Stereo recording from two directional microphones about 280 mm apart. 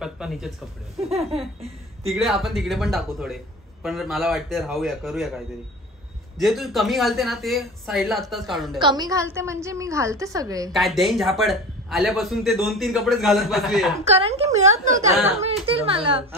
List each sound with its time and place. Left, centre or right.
0.0 s a sound: centre
2.0 s a man's voice: centre
6.3 s a man's voice: centre
8.7 s a woman's voice: centre
10.7 s a man's voice: centre
14.0 s a woman's voice: right